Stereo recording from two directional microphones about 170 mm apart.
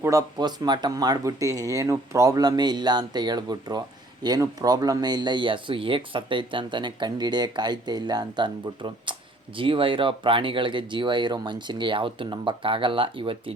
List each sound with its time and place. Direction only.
0.0 s speech: 20° right (ahead or behind)